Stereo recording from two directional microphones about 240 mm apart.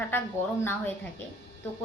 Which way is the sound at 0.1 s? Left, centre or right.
Centre.